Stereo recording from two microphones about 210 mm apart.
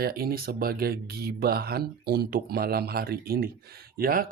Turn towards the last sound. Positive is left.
turn(degrees=-45)  # may be behind; listen again after turning